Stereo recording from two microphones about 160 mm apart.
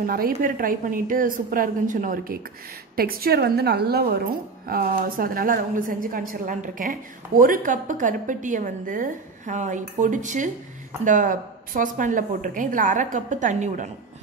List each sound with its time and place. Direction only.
0.0 s a woman's voice: 65° right (ahead or behind)
3.0 s a woman's voice: 70° right (ahead or behind)
4.6 s a woman's voice: 65° right (ahead or behind); by 13.8 s 50° right (ahead or behind)